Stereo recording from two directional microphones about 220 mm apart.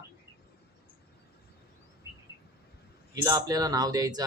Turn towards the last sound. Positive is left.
turn(degrees=-15)  # may be behind; listen again after turning